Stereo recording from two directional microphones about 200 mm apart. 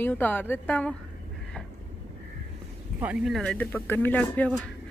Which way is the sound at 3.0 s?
5° right (ahead or behind).